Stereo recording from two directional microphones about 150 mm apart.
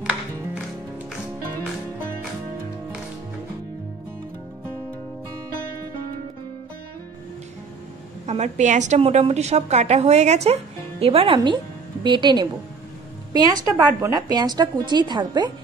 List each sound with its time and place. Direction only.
8.3 s a woman's voice: 50° right (ahead or behind); by 15.5 s 30° right (ahead or behind)